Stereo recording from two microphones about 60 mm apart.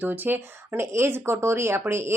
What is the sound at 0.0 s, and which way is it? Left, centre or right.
Speech, right.